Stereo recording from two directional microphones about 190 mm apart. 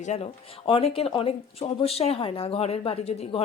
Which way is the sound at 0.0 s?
35° left (ahead or behind).